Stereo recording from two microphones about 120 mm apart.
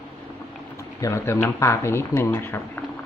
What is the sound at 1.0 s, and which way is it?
Speech, 20° left (ahead or behind).